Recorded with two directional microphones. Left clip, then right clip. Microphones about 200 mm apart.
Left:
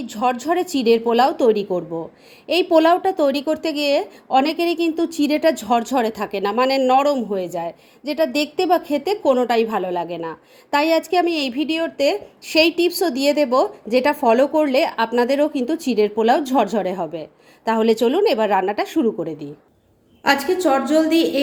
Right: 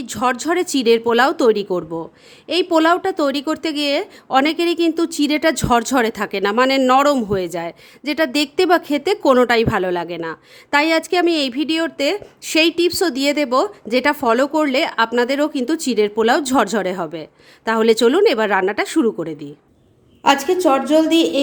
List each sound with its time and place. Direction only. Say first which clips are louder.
0.0 s a woman's voice: right 1 dB; 20° right (ahead or behind)